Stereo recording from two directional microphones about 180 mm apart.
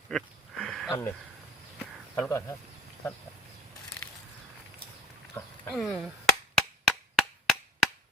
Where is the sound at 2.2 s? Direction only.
15° left (ahead or behind).